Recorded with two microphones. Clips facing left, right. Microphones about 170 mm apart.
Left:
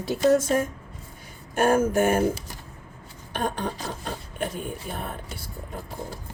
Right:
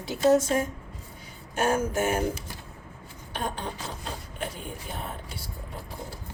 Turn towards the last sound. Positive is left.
turn(degrees=50)  # may be behind; listen again after turning